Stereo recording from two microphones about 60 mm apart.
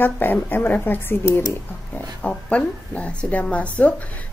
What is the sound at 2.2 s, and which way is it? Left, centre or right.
A woman's voice, centre.